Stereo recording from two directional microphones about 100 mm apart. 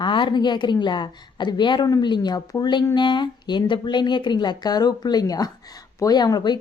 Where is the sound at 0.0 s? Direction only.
50° left (ahead or behind).